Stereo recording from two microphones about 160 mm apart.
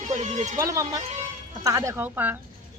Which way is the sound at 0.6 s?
20° right (ahead or behind).